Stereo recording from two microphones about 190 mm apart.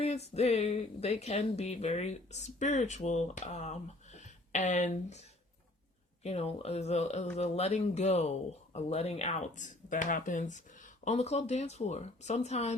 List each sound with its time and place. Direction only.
0.0 s speech: 35° left (ahead or behind)
6.2 s speech: 35° left (ahead or behind)